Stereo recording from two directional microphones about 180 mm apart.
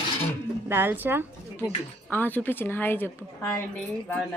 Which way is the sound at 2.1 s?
10° left (ahead or behind).